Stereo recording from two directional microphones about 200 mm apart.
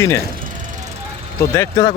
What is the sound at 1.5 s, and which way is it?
Speech, 15° left (ahead or behind).